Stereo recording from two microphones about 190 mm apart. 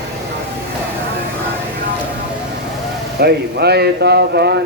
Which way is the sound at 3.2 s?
60° right (ahead or behind).